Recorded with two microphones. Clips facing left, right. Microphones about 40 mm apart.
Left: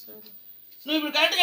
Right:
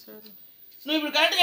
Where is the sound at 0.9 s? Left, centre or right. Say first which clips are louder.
Even; centre.